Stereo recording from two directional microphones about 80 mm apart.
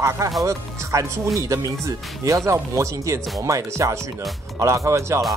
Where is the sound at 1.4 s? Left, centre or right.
Right.